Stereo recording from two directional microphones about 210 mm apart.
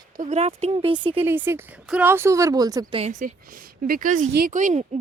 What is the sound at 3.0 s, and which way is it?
Speech, 35° right (ahead or behind).